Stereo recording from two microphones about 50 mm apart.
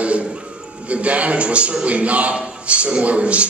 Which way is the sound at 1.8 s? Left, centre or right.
Right.